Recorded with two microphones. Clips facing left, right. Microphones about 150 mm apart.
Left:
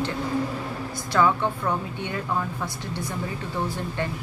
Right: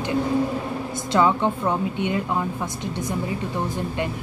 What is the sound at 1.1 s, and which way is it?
A woman's voice, 20° right (ahead or behind).